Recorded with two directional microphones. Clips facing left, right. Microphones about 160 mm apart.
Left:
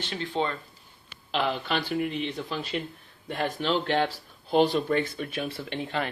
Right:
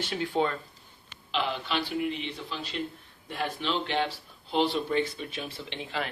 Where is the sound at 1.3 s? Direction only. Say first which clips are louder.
Left 3 dB; 50° left (ahead or behind).